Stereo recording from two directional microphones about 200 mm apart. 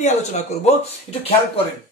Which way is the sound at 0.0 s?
35° left (ahead or behind).